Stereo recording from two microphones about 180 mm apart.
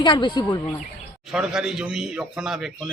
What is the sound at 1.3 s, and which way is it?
A man's voice, centre (ahead or behind).